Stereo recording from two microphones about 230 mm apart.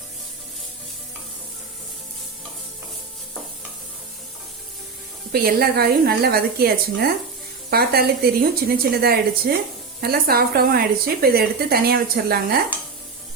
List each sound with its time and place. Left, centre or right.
5.3 s a woman's voice: right